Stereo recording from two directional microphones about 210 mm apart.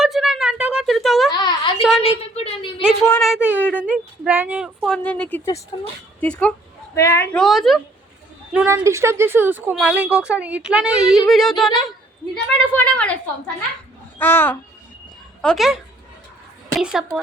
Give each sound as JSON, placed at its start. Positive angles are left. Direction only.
{"t": 0.0, "sound": "a sound", "side_deg": 0}
{"t": 1.3, "sound": "a sound", "side_deg": 20}
{"t": 3.1, "sound": "a woman's voice", "side_deg": 0}
{"t": 7.4, "sound": "speech", "side_deg": 0}
{"t": 8.5, "sound": "speech", "side_deg": -10}
{"t": 14.2, "sound": "a woman's voice", "side_deg": 10}